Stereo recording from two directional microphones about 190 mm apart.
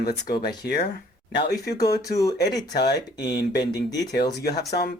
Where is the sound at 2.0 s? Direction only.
20° left (ahead or behind).